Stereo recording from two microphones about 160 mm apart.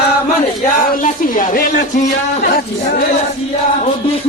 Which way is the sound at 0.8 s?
60° left (ahead or behind).